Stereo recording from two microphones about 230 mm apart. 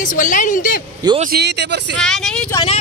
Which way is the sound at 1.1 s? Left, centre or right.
Right.